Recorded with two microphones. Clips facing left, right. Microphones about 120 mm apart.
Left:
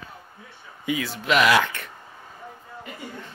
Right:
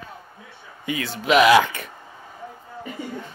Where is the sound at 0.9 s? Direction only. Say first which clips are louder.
Right 3 dB; 5° left (ahead or behind).